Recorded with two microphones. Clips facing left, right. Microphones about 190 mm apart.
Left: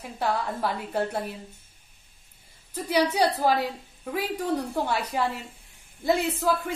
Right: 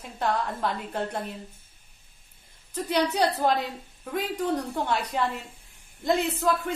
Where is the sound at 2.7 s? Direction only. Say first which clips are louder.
Left 1 dB; 10° left (ahead or behind).